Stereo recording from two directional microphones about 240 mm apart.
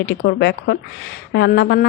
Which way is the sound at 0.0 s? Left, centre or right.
Left.